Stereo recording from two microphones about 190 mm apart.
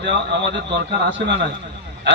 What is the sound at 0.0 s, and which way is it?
Speech, 65° right (ahead or behind).